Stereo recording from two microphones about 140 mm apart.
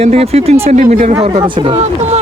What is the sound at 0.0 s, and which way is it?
Speech, 45° right (ahead or behind).